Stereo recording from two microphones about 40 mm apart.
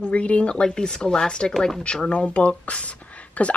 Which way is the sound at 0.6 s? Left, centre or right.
Centre.